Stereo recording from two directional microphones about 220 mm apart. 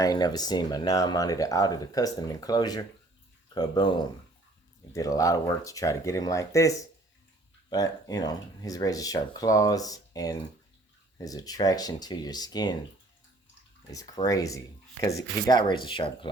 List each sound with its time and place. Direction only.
0.0 s speech: 20° left (ahead or behind)
14.3 s speech: 15° left (ahead or behind)